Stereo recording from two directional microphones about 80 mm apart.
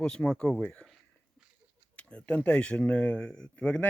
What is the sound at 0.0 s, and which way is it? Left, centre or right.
Speech, centre.